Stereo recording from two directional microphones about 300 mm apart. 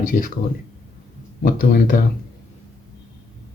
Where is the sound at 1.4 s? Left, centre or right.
Left.